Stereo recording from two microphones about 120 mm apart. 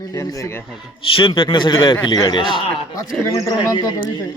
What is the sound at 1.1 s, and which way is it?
A man's voice, 45° left (ahead or behind).